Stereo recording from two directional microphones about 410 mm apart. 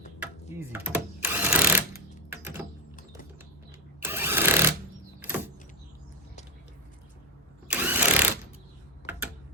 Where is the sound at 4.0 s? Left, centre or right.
Centre.